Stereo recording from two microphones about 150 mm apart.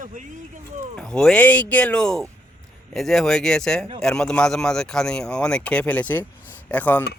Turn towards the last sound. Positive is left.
turn(degrees=10)  # may be behind; listen again after turning